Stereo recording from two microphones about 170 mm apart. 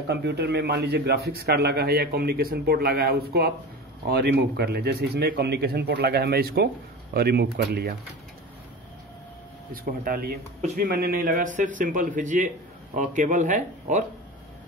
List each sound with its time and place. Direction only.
0.1 s a man's voice: 85° right; by 7.9 s 70° right (ahead or behind)
9.7 s a man's voice: 55° right (ahead or behind)